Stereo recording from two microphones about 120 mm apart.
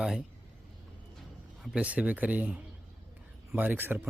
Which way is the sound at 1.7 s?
10° right (ahead or behind).